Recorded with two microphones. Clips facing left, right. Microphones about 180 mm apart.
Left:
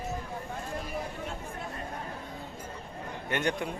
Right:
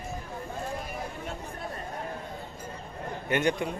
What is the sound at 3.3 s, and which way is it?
Speech, centre (ahead or behind).